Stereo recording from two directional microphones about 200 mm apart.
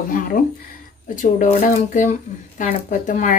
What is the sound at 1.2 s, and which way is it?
Speech, 40° left (ahead or behind).